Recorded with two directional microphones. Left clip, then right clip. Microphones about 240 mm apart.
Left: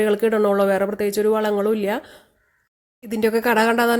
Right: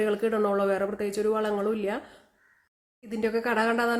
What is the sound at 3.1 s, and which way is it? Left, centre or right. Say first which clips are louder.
Speech: left 8 dB; left.